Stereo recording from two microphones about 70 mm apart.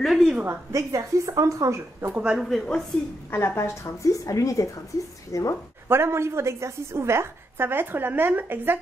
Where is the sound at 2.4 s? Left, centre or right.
Centre.